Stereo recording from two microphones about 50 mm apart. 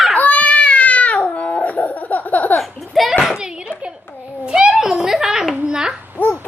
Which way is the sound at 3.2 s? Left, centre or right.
Centre.